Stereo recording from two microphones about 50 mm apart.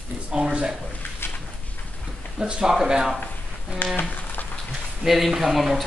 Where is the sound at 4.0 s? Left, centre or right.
Left.